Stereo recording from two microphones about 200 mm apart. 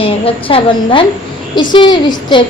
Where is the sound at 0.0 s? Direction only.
25° left (ahead or behind).